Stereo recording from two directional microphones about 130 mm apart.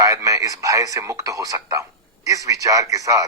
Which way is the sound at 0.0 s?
25° right (ahead or behind).